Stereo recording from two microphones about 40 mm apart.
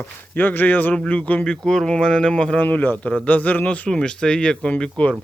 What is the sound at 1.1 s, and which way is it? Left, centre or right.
Speech, left.